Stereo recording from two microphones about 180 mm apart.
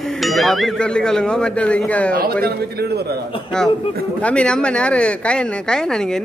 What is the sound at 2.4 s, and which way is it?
Speech, 60° right (ahead or behind).